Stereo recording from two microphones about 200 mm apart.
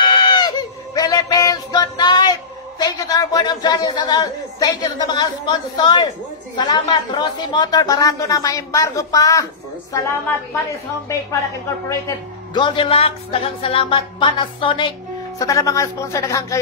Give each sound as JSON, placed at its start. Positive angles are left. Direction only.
{"t": 0.0, "sound": "goat", "side_deg": 20}
{"t": 0.9, "sound": "a sound", "side_deg": 20}
{"t": 2.8, "sound": "a man's voice", "side_deg": 20}
{"t": 12.5, "sound": "speech", "side_deg": 25}